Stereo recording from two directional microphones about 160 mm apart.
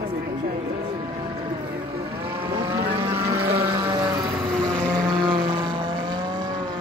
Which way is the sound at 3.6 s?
30° right (ahead or behind).